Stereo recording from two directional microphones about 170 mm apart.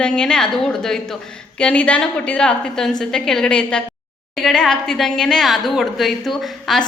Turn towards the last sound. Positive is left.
turn(degrees=0)  # may be behind; listen again after turning